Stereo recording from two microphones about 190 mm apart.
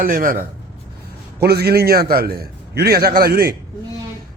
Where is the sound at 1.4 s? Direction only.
55° right (ahead or behind).